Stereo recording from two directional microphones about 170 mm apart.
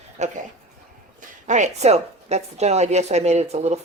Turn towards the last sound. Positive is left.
turn(degrees=-40)  # may be behind; listen again after turning